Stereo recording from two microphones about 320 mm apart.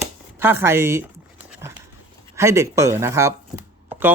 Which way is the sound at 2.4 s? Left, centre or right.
Centre.